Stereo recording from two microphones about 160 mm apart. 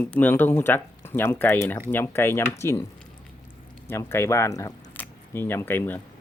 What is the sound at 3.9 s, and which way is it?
Speech, 15° left (ahead or behind).